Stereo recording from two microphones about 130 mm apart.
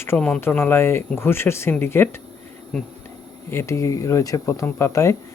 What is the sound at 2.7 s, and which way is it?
Speech, 5° left (ahead or behind).